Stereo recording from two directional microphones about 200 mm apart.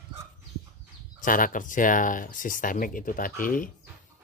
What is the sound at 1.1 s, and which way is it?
Speech, 40° left (ahead or behind).